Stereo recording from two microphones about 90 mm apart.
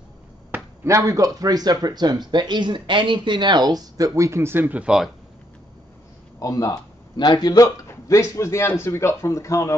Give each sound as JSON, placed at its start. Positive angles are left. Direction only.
{"t": 0.5, "sound": "a sound", "side_deg": -20}
{"t": 0.8, "sound": "speech", "side_deg": -35}
{"t": 6.4, "sound": "speech", "side_deg": 40}
{"t": 7.9, "sound": "a man's voice", "side_deg": 35}